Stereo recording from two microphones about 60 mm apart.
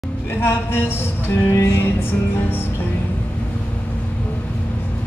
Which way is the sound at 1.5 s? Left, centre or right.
Left.